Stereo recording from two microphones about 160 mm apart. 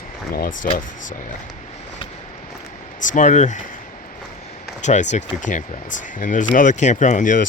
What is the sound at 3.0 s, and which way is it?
Speech, 55° left (ahead or behind).